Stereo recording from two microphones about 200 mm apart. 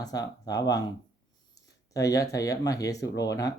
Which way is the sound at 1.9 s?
15° left (ahead or behind).